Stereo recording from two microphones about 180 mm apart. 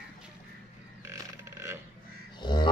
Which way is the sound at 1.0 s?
15° right (ahead or behind).